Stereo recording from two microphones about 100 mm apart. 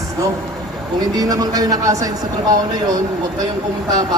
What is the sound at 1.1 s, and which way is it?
Speech, 40° right (ahead or behind).